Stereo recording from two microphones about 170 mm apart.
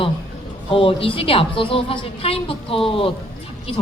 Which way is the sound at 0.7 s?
30° left (ahead or behind).